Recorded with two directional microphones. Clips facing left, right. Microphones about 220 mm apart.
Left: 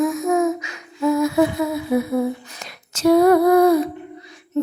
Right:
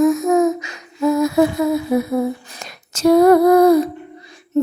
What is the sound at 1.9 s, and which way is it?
Female singing, 40° right (ahead or behind).